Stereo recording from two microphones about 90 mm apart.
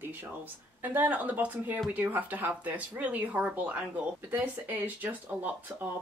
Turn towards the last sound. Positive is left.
turn(degrees=-20)  # may be behind; listen again after turning